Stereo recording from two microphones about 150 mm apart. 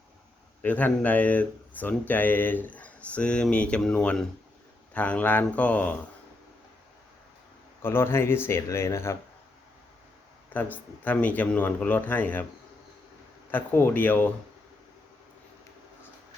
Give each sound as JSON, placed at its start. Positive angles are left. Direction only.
{"t": 0.6, "sound": "speech", "side_deg": 10}
{"t": 7.8, "sound": "speech", "side_deg": 15}
{"t": 10.5, "sound": "speech", "side_deg": 10}
{"t": 13.5, "sound": "speech", "side_deg": 15}